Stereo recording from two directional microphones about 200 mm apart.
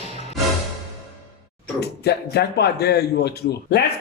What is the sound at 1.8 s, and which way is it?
Speech, 55° left (ahead or behind).